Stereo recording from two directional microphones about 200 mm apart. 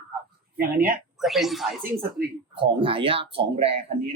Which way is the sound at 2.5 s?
25° right (ahead or behind).